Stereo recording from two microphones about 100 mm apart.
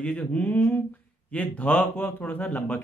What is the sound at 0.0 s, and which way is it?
Speech, 15° left (ahead or behind).